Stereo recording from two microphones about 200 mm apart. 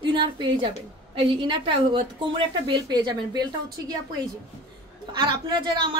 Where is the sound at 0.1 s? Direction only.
25° right (ahead or behind).